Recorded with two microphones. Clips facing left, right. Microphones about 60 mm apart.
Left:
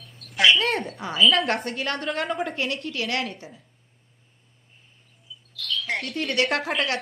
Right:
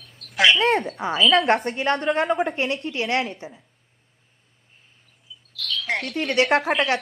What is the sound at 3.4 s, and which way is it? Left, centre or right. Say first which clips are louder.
Speech: right 5 dB; right.